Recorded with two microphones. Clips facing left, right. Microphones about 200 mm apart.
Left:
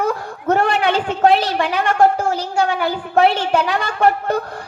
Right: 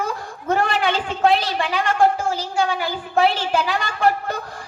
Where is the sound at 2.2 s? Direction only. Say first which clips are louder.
Left 3 dB; 65° left (ahead or behind).